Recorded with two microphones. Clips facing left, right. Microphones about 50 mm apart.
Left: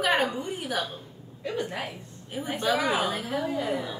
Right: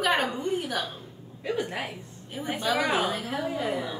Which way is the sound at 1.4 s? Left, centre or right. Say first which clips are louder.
Right 1 dB; centre.